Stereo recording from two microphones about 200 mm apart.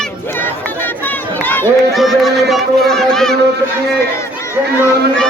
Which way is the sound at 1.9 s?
Centre (ahead or behind).